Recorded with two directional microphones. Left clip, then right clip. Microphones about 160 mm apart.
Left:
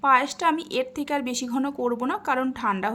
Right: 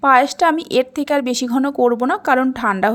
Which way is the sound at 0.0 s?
40° right (ahead or behind).